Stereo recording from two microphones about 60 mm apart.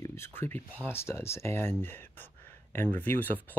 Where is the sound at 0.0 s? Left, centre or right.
Left.